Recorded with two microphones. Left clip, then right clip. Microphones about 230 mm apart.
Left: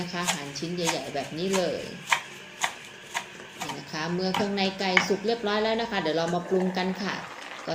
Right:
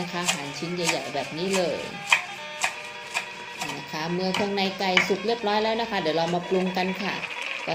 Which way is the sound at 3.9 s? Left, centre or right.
Centre.